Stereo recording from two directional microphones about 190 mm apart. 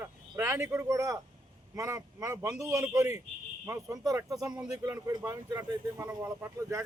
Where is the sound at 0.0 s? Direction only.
15° right (ahead or behind).